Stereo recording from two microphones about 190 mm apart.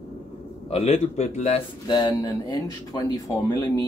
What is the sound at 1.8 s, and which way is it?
Speech, 20° left (ahead or behind).